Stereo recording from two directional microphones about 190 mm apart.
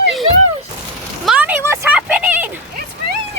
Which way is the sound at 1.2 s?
5° right (ahead or behind).